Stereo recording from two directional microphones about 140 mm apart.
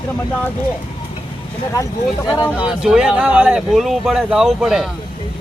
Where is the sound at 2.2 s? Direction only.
25° left (ahead or behind).